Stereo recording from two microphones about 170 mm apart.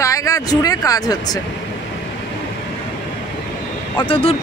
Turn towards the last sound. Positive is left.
turn(degrees=35)  # may be behind; listen again after turning